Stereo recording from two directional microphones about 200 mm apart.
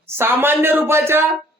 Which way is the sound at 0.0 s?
10° right (ahead or behind).